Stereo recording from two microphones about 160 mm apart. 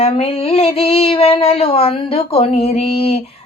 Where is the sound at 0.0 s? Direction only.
35° left (ahead or behind).